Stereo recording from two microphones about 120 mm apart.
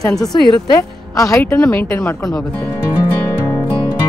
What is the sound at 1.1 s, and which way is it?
A woman's voice, 30° left (ahead or behind).